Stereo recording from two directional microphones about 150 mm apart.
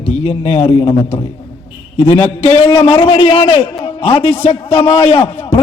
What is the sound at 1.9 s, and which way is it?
A man's voice, 40° left (ahead or behind).